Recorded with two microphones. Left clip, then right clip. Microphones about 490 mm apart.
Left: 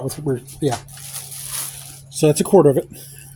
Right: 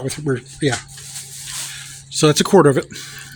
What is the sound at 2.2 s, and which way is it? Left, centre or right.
Speech, left.